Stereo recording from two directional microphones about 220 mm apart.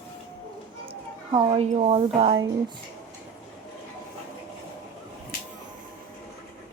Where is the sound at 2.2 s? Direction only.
20° right (ahead or behind).